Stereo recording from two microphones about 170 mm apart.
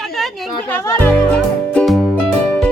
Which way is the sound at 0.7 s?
15° left (ahead or behind).